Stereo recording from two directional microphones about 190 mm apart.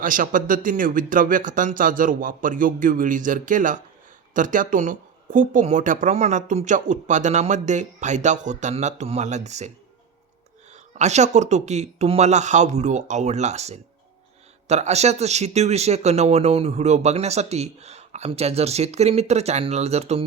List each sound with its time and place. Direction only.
0.0 s speech: 45° right (ahead or behind)